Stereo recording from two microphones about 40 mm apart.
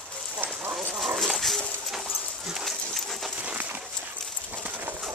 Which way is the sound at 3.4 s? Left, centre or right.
Right.